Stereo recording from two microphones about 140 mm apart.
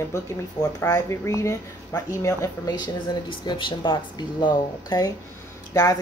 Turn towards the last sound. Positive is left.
turn(degrees=25)  # may be behind; listen again after turning